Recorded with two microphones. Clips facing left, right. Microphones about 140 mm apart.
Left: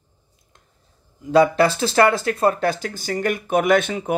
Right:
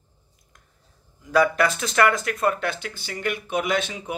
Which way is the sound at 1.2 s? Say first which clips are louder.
Left 5 dB; 25° left (ahead or behind).